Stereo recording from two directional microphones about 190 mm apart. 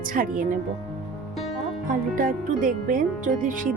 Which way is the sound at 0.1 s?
45° right (ahead or behind).